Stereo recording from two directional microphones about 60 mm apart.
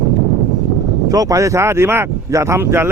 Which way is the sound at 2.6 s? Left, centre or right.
Right.